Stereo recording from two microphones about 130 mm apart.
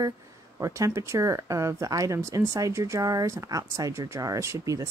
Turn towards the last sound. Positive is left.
turn(degrees=-25)  # may be behind; listen again after turning